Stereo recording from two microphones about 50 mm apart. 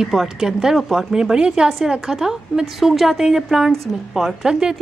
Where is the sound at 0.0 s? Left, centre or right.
Centre.